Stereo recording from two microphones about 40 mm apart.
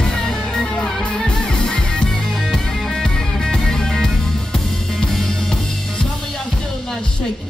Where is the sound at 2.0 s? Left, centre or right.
Centre.